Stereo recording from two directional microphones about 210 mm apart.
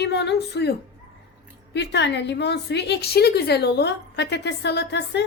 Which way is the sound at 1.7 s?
55° left (ahead or behind).